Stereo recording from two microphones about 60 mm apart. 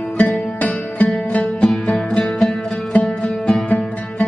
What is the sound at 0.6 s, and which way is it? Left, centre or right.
Music, left.